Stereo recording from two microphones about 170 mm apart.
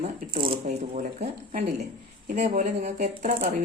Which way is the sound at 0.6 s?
45° right (ahead or behind).